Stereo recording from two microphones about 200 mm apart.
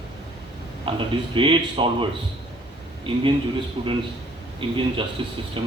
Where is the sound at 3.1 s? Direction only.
25° right (ahead or behind).